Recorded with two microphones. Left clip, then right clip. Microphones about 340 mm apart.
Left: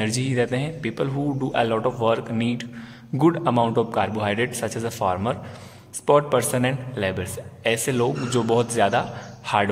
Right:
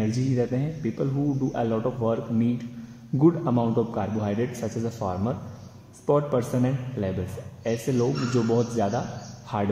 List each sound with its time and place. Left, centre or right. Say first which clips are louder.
0.0 s a man's voice: left 3 dB; left
3.2 s a man's voice: left 3 dB; left
4.3 s a man's voice: left 5 dB; left
7.6 s a man's voice: left 4 dB; left